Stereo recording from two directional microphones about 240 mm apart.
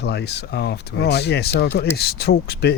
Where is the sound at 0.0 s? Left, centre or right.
Left.